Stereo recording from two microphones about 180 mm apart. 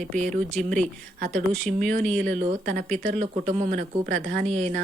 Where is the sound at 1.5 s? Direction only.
5° left (ahead or behind).